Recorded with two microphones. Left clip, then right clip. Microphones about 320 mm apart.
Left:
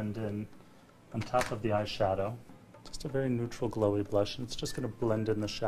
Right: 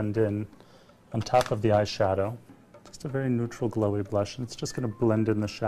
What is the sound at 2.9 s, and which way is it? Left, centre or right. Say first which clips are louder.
Speech: right 3 dB; right.